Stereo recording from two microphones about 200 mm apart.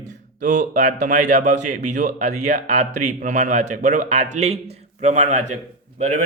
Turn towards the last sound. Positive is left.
turn(degrees=-35)  # may be behind; listen again after turning